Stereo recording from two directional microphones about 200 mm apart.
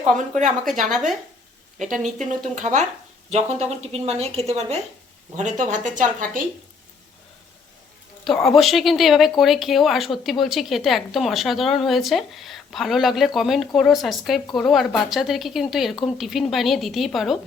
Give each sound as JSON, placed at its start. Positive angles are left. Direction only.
{"t": 0.2, "sound": "a woman's voice", "side_deg": -40}
{"t": 1.8, "sound": "a woman's voice", "side_deg": -35}
{"t": 8.2, "sound": "a woman's voice", "side_deg": 0}